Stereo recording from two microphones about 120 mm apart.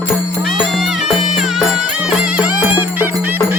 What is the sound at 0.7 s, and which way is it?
Music, centre (ahead or behind).